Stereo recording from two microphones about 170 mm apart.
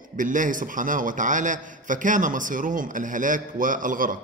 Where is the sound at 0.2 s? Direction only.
50° right (ahead or behind).